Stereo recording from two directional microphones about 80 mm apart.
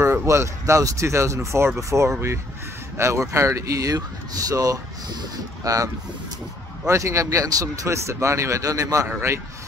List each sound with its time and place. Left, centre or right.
0.0 s speech: right
6.9 s speech: right